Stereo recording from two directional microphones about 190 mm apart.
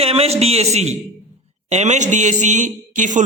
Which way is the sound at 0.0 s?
30° right (ahead or behind).